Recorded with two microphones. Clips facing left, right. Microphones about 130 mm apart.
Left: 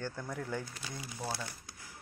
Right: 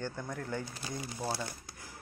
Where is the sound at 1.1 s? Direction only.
15° right (ahead or behind).